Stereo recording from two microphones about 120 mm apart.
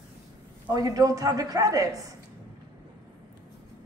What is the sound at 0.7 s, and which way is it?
A woman's voice, 30° right (ahead or behind).